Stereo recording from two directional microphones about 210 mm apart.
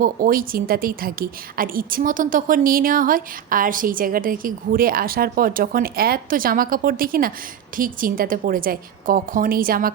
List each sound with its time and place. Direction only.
0.0 s a woman's voice: 40° right (ahead or behind)